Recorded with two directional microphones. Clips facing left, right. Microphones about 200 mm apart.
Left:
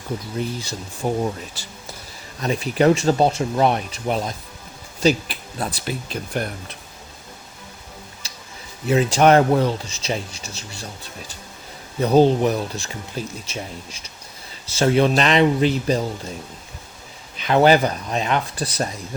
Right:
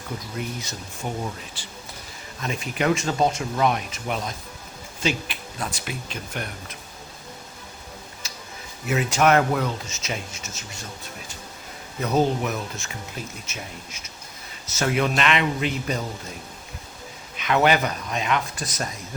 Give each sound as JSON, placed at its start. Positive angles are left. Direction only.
{"t": 0.3, "sound": "speech", "side_deg": 30}
{"t": 2.4, "sound": "speech", "side_deg": 35}
{"t": 8.2, "sound": "music", "side_deg": 30}
{"t": 8.9, "sound": "speech", "side_deg": 30}
{"t": 11.9, "sound": "speech", "side_deg": 30}
{"t": 17.3, "sound": "speech", "side_deg": 35}